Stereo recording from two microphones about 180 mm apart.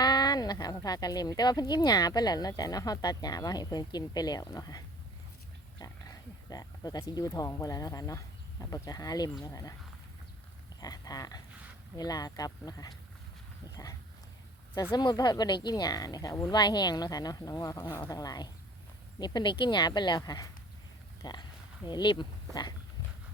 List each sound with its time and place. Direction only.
0.0 s speech: 25° left (ahead or behind)
5.8 s speech: 20° left (ahead or behind)
10.8 s a sound: 20° left (ahead or behind)
11.9 s speech: 20° left (ahead or behind)
14.9 s speech: 25° left (ahead or behind)